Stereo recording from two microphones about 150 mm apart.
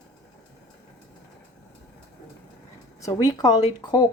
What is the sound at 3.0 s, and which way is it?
Speech, 25° left (ahead or behind).